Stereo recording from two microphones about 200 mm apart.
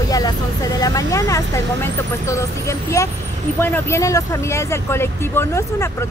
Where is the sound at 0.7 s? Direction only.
15° left (ahead or behind).